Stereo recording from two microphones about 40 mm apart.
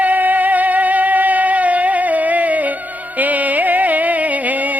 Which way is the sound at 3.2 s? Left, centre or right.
Right.